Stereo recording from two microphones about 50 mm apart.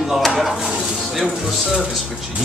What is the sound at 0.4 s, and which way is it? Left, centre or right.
Speech, centre.